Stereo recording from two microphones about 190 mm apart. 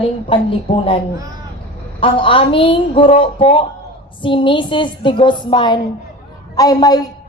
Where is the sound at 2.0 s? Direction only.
25° left (ahead or behind).